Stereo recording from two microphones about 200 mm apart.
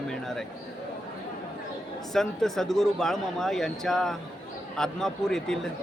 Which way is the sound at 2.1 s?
Centre (ahead or behind).